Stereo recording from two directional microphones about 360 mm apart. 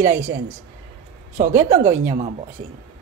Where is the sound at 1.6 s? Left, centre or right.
Centre.